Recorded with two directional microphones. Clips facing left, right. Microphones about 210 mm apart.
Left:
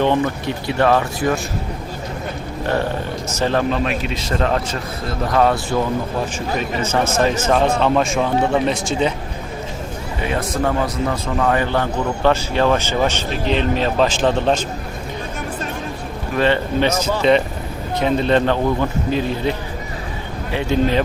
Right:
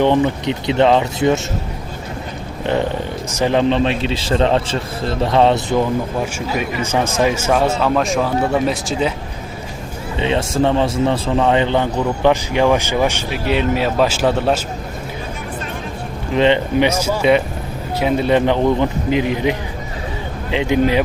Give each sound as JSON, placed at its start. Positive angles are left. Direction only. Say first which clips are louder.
{"t": 0.0, "sound": "a man's voice", "louder": "right 3 dB", "side_deg": -20}
{"t": 3.3, "sound": "a man's voice", "louder": "right 3 dB", "side_deg": -15}
{"t": 3.7, "sound": "a man's voice", "louder": "right 4 dB", "side_deg": -30}
{"t": 10.2, "sound": "a man's voice", "louder": "right 4 dB", "side_deg": -25}
{"t": 16.3, "sound": "a man's voice", "louder": "right 3 dB", "side_deg": -20}